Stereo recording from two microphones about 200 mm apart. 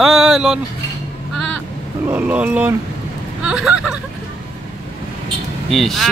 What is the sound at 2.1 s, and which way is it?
Speech, 10° right (ahead or behind).